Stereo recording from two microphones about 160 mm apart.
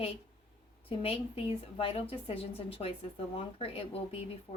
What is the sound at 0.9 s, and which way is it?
A woman's voice, 35° left (ahead or behind).